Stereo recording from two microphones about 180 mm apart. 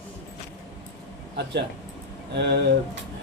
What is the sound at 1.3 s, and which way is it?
Speech, 70° right (ahead or behind).